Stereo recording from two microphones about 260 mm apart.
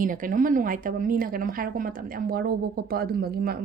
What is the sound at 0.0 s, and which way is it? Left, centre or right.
A woman's voice, right.